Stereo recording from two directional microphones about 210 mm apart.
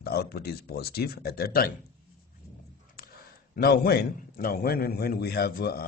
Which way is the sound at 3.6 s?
45° left (ahead or behind).